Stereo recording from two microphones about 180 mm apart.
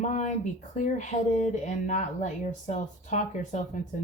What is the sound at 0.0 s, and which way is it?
Speech, 45° left (ahead or behind).